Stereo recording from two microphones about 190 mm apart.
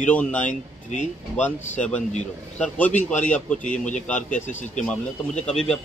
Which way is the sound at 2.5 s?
5° left (ahead or behind).